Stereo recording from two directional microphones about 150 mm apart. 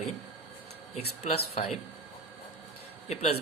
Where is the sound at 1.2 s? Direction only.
45° left (ahead or behind).